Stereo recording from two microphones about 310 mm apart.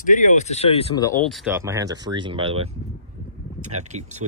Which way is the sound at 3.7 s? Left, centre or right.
Right.